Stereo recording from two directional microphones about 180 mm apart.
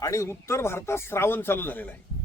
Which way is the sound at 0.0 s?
15° left (ahead or behind).